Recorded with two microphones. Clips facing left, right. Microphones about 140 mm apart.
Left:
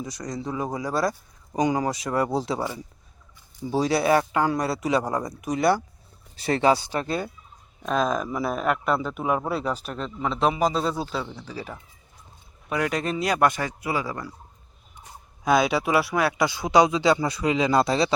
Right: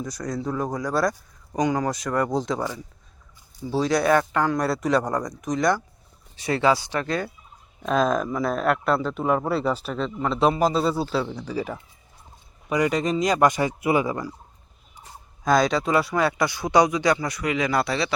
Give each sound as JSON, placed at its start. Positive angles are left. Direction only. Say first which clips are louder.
{"t": 0.0, "sound": "speech", "louder": "right 3 dB", "side_deg": 0}
{"t": 6.6, "sound": "speech", "louder": "even", "side_deg": 20}
{"t": 7.8, "sound": "speech", "louder": "right 2 dB", "side_deg": 0}
{"t": 11.4, "sound": "speech", "louder": "right 7 dB", "side_deg": -10}
{"t": 12.6, "sound": "speech", "louder": "right 4 dB", "side_deg": 0}
{"t": 13.6, "sound": "speech", "louder": "right 6 dB", "side_deg": -15}
{"t": 15.4, "sound": "speech", "louder": "right 1 dB", "side_deg": 5}
{"t": 16.4, "sound": "speech", "louder": "left 1 dB", "side_deg": 20}